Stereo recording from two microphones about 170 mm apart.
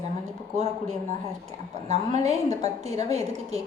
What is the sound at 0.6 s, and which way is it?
A woman's voice, 40° right (ahead or behind).